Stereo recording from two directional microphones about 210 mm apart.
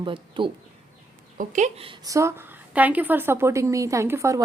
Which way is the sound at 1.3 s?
35° right (ahead or behind).